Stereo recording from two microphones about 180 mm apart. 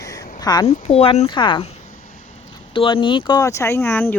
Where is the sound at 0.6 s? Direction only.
35° left (ahead or behind).